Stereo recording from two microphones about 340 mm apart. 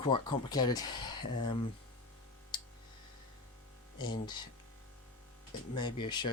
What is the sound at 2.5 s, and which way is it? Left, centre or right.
Clicking, centre.